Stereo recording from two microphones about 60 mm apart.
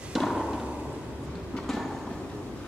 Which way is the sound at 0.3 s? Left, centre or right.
Centre.